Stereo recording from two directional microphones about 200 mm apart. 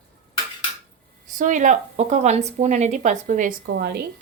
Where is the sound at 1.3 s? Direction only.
40° right (ahead or behind).